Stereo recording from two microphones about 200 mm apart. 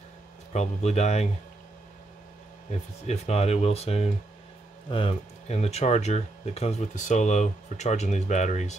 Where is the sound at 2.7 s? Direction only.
30° left (ahead or behind).